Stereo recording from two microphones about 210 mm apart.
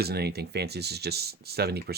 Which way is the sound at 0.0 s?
50° right (ahead or behind).